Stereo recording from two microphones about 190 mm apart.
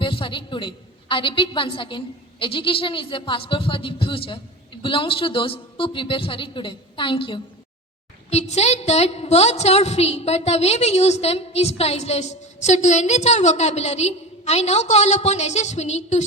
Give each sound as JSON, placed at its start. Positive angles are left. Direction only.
{"t": 0.0, "sound": "a woman's voice", "side_deg": 25}